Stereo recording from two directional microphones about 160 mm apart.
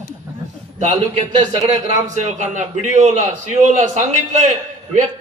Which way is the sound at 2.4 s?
50° right (ahead or behind).